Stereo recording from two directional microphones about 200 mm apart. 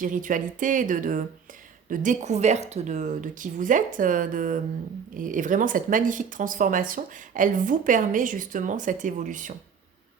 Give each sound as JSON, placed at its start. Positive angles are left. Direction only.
{"t": 0.0, "sound": "speech", "side_deg": -40}